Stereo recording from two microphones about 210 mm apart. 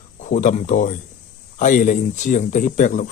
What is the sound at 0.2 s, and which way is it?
Speech, 35° left (ahead or behind).